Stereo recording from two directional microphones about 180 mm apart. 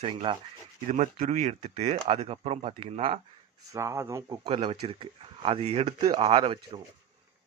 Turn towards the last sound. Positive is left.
turn(degrees=-30)  # may be behind; listen again after turning